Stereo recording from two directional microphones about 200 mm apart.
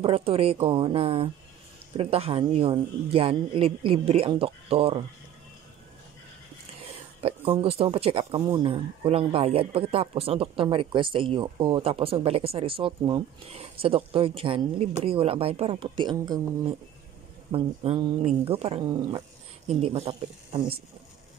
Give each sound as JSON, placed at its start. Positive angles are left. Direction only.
{"t": 0.0, "sound": "speech", "side_deg": -30}
{"t": 7.2, "sound": "speech", "side_deg": -30}
{"t": 8.4, "sound": "speech", "side_deg": -10}
{"t": 8.6, "sound": "speech", "side_deg": -25}